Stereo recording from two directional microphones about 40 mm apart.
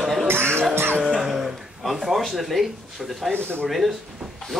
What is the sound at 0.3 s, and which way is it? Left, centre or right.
Music, right.